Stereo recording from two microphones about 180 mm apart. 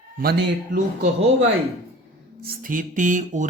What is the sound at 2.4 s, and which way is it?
Music, 50° right (ahead or behind).